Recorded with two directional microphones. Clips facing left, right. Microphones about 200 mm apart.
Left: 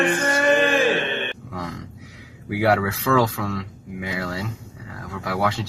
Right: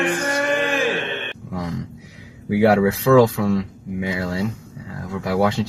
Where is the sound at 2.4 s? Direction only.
25° right (ahead or behind).